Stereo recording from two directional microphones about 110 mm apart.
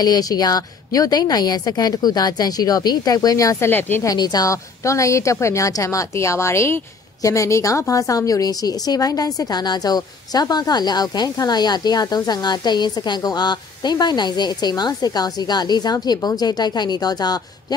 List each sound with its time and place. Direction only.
0.0 s a woman's voice: 35° left (ahead or behind)
4.0 s a woman's voice: 35° left (ahead or behind)